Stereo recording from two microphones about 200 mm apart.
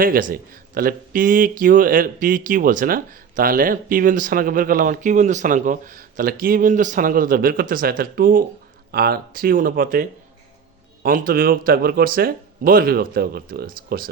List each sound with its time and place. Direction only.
0.0 s a man's voice: 45° right (ahead or behind)